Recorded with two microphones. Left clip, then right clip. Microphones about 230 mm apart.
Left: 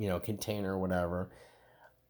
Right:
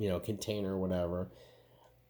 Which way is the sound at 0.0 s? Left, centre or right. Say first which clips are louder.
Even; left.